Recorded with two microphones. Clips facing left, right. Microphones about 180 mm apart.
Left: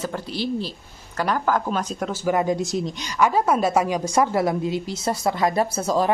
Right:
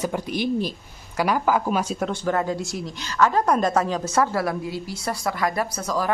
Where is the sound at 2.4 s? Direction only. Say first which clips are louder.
Left 3 dB; 20° left (ahead or behind).